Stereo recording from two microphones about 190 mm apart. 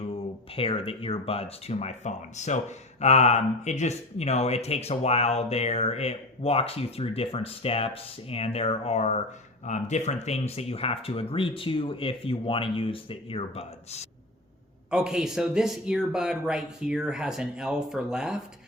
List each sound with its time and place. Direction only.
0.0 s speech: 30° left (ahead or behind)
14.8 s speech: 5° right (ahead or behind)